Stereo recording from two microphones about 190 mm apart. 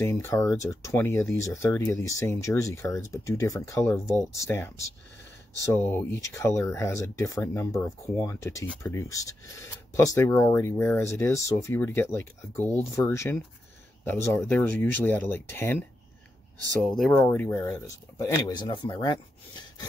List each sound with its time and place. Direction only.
0.0 s speech: 15° left (ahead or behind)
16.8 s speech: 5° left (ahead or behind); by 19.1 s 20° left (ahead or behind)